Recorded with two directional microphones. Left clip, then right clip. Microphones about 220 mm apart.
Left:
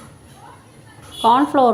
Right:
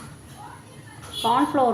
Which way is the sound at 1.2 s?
35° left (ahead or behind).